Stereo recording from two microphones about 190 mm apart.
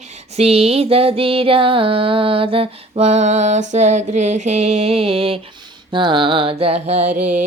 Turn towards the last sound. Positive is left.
turn(degrees=-10)  # may be behind; listen again after turning